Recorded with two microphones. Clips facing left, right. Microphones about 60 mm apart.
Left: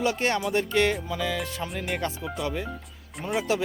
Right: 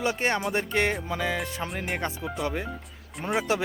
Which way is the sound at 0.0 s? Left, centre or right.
Right.